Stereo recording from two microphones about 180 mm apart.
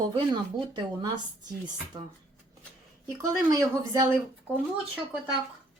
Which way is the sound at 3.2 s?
15° right (ahead or behind).